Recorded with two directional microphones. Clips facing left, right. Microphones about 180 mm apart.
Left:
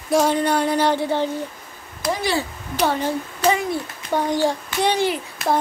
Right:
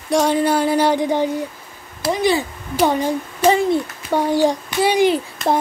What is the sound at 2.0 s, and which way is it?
A child's voice, 20° right (ahead or behind).